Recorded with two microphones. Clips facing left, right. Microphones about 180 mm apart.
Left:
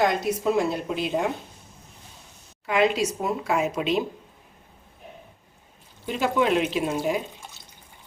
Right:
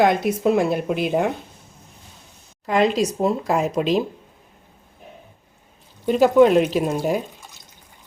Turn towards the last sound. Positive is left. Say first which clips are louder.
# right 4 dB
turn(degrees=-45)  # may be behind; listen again after turning